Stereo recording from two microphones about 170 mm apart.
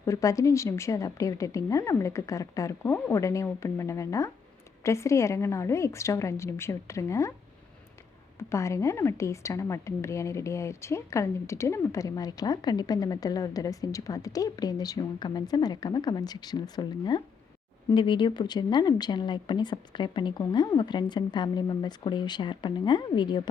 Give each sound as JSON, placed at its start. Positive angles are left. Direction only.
{"t": 0.0, "sound": "a woman's voice", "side_deg": 20}
{"t": 8.4, "sound": "a woman's voice", "side_deg": 15}